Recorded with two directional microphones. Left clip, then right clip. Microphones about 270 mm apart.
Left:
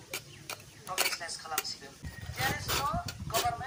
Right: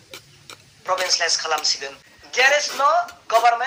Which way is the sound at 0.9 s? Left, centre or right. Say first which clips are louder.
Right 13 dB; right.